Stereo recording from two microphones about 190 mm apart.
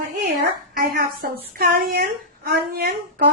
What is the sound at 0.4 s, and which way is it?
A woman's voice, 50° right (ahead or behind).